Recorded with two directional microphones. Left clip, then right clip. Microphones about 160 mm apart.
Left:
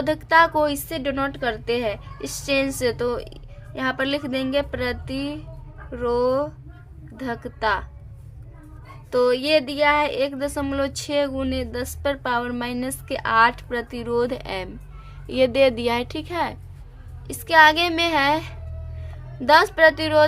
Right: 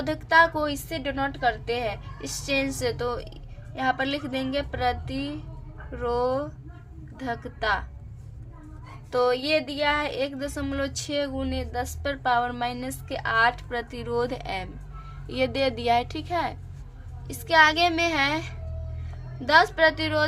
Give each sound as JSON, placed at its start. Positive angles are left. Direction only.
{"t": 0.0, "sound": "a woman's voice", "side_deg": 35}
{"t": 9.0, "sound": "a woman's voice", "side_deg": 35}